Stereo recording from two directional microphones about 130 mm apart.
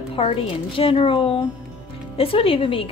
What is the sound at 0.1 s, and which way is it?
A woman's voice, 45° left (ahead or behind).